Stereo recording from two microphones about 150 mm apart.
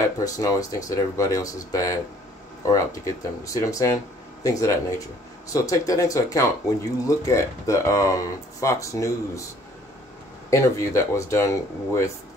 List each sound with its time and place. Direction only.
0.2 s speech: 25° left (ahead or behind)
10.5 s speech: 20° left (ahead or behind)